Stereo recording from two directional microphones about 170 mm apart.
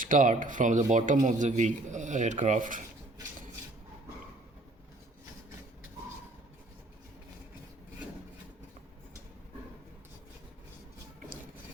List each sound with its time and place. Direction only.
0.0 s speech: 50° right (ahead or behind)